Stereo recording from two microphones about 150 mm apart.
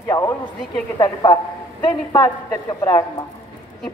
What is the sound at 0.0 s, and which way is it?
A woman's voice, 20° left (ahead or behind).